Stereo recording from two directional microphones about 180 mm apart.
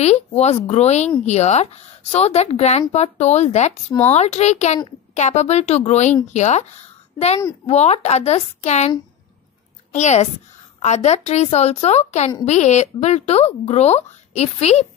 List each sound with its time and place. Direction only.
0.0 s speech: 35° left (ahead or behind)
7.6 s speech: 35° left (ahead or behind)
9.9 s speech: 40° left (ahead or behind)